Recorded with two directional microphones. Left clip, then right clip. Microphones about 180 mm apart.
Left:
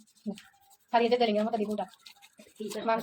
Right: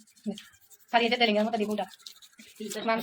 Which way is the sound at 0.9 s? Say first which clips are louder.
Right 1 dB; centre (ahead or behind).